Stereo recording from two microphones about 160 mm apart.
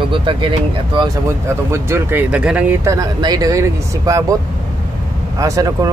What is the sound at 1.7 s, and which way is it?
Speech, 15° right (ahead or behind).